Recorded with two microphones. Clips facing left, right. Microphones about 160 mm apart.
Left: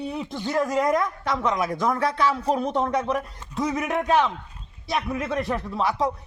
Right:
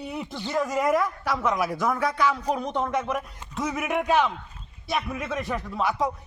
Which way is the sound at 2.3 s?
30° left (ahead or behind).